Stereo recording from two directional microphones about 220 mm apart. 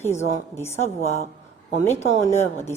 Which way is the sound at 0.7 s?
30° left (ahead or behind).